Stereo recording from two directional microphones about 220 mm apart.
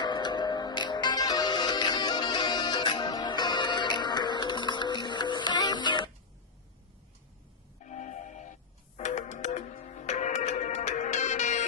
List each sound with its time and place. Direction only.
0.0 s music: 20° left (ahead or behind)
7.9 s music: 35° left (ahead or behind)